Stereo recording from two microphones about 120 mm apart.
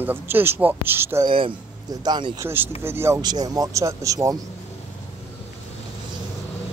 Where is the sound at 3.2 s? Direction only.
35° right (ahead or behind).